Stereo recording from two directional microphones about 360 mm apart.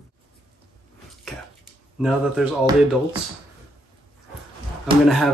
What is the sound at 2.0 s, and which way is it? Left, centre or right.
Speech, centre.